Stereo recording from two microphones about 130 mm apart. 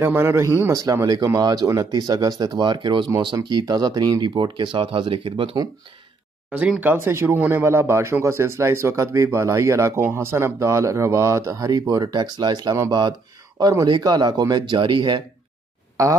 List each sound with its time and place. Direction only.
0.0 s speech: 20° right (ahead or behind); by 5.6 s 45° right (ahead or behind)
6.5 s speech: 10° right (ahead or behind); by 15.2 s 35° right (ahead or behind)
16.0 s speech: 25° right (ahead or behind)